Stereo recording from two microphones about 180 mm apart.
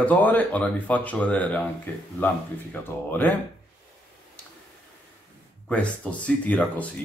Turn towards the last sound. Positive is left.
turn(degrees=10)  # may be behind; listen again after turning